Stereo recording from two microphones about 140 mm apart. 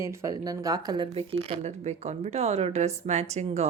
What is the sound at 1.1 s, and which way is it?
Speech, 45° right (ahead or behind).